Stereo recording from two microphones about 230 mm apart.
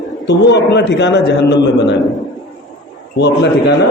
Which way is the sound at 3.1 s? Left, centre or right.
Left.